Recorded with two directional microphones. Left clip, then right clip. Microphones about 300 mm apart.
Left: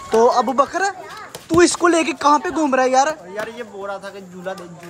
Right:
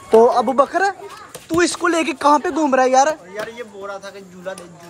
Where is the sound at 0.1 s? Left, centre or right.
Centre.